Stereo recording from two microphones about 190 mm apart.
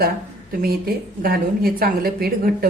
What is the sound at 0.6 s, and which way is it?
A woman's voice, 50° right (ahead or behind).